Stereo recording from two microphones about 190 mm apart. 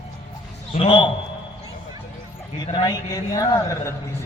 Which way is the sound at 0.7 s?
25° left (ahead or behind).